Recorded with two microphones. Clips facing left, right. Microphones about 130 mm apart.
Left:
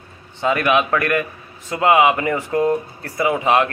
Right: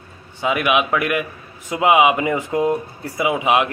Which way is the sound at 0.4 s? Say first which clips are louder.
Left 1 dB; 10° right (ahead or behind).